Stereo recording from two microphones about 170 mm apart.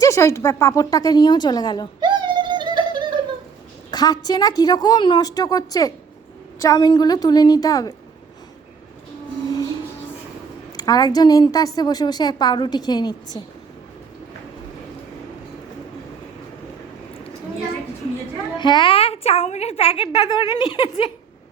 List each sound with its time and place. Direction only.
0.0 s a woman's voice: 15° left (ahead or behind)
2.0 s a sound: 25° right (ahead or behind)
3.9 s a woman's voice: 20° left (ahead or behind)
10.8 s a woman's voice: 20° left (ahead or behind)
18.5 s a woman's voice: 25° left (ahead or behind)